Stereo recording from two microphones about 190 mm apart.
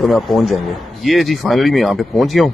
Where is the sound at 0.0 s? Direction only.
Centre (ahead or behind).